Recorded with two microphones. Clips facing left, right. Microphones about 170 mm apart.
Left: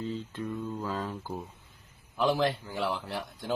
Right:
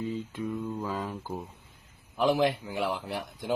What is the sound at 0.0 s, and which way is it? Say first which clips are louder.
Mantra: right 2 dB; 5° right (ahead or behind).